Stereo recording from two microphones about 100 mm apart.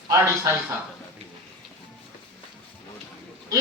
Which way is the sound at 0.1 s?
35° right (ahead or behind).